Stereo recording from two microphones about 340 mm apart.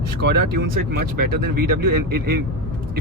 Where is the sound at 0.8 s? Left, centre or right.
Right.